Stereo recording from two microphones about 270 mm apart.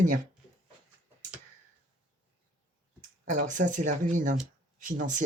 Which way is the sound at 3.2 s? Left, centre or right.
Right.